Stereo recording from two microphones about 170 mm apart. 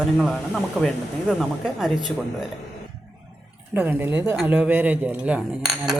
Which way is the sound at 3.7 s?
10° right (ahead or behind).